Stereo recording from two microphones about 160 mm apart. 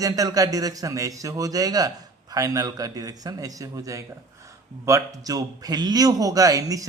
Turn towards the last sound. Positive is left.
turn(degrees=-20)  # may be behind; listen again after turning